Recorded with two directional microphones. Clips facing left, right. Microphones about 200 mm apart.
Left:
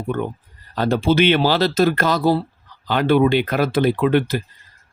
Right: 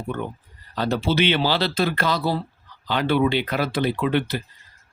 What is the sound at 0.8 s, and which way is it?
Speech, 50° left (ahead or behind).